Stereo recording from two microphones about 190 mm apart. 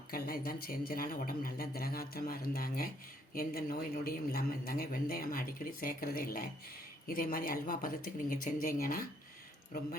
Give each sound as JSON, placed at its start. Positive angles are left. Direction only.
{"t": 0.1, "sound": "a man's voice", "side_deg": 50}